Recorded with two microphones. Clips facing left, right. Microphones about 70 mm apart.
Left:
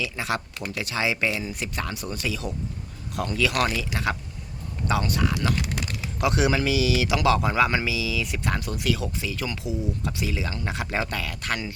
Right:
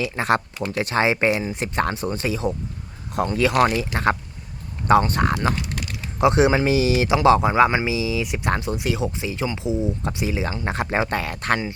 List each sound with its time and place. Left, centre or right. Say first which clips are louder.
0.0 s speech: right 7 dB; right
6.1 s speech: right 6 dB; right